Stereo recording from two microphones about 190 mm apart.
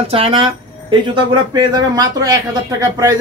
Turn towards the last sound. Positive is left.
turn(degrees=-15)  # may be behind; listen again after turning